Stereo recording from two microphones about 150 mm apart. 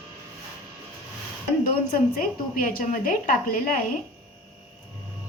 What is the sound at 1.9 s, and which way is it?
A woman's voice, 65° left (ahead or behind).